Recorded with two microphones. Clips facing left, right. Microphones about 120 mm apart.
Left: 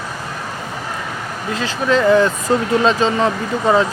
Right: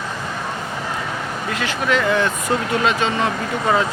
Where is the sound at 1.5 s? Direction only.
30° left (ahead or behind).